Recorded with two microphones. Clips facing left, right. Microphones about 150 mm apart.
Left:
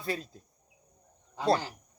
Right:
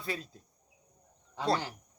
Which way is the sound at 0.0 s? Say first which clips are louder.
Left 3 dB; 40° left (ahead or behind).